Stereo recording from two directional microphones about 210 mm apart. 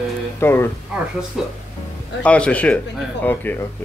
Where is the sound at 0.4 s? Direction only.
10° left (ahead or behind).